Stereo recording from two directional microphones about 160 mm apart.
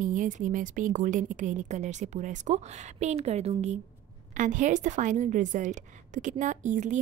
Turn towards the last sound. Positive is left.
turn(degrees=-50)  # may be behind; listen again after turning